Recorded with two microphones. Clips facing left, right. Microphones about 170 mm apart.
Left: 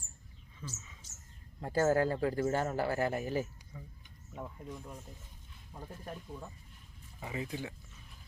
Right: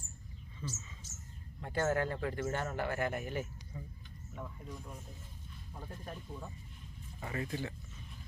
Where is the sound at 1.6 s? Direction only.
35° left (ahead or behind).